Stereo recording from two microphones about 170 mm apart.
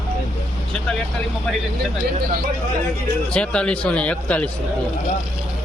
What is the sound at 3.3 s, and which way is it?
Speech, 5° left (ahead or behind).